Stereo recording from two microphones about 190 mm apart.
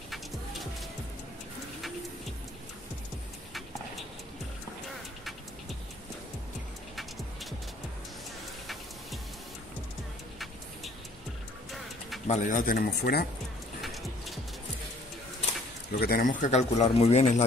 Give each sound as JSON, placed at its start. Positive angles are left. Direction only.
{"t": 0.1, "sound": "vehicle", "side_deg": 0}
{"t": 12.3, "sound": "speech", "side_deg": 40}
{"t": 13.7, "sound": "music", "side_deg": 0}
{"t": 15.9, "sound": "speech", "side_deg": 55}